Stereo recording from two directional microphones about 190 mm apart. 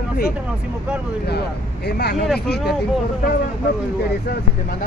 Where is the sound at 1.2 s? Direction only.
60° left (ahead or behind).